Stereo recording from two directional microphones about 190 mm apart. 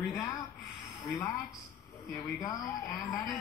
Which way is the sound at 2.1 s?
20° left (ahead or behind).